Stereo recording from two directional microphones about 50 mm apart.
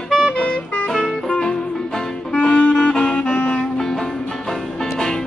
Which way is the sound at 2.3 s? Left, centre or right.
Centre.